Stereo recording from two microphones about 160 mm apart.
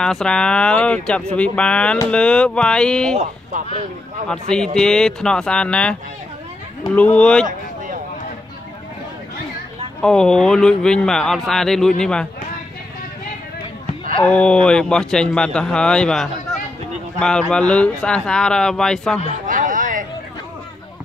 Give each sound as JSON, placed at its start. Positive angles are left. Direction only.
{"t": 0.0, "sound": "speech", "side_deg": 5}
{"t": 3.5, "sound": "speech", "side_deg": -50}
{"t": 4.3, "sound": "speech", "side_deg": 5}
{"t": 7.0, "sound": "speech", "side_deg": 10}
{"t": 10.0, "sound": "speech", "side_deg": 5}
{"t": 14.2, "sound": "speech", "side_deg": 5}
{"t": 19.2, "sound": "a sound", "side_deg": -55}